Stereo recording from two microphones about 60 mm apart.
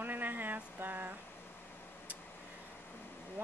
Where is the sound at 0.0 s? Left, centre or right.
Right.